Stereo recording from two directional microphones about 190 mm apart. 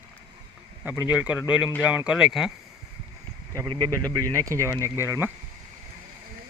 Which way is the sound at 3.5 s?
20° right (ahead or behind).